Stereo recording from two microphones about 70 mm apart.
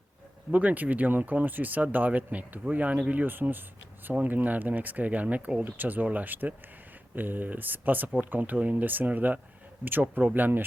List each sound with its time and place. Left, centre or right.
0.5 s speech: right